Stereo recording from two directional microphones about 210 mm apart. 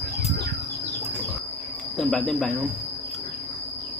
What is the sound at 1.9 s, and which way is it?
Cricket, centre (ahead or behind).